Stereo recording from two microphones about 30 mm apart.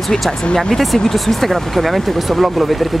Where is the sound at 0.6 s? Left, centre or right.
Centre.